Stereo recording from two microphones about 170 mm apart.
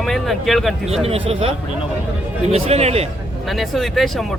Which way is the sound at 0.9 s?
35° right (ahead or behind).